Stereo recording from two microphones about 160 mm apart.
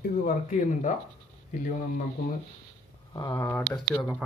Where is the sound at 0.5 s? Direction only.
50° left (ahead or behind).